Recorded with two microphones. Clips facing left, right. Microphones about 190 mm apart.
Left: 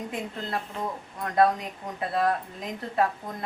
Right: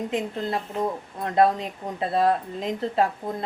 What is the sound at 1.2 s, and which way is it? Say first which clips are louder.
A woman's voice: right 2 dB; 25° right (ahead or behind).